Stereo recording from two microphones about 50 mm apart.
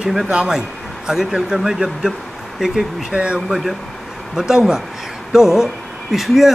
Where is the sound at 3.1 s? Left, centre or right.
Right.